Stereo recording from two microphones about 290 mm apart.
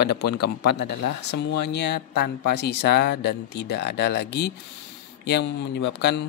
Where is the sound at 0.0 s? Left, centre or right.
Left.